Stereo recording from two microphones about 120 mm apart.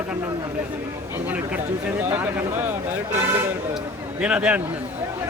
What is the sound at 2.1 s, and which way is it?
Speech, 15° right (ahead or behind).